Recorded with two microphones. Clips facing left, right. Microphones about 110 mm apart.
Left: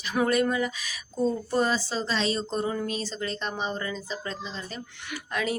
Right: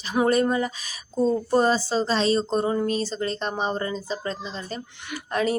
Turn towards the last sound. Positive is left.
turn(degrees=-40)  # may be behind; listen again after turning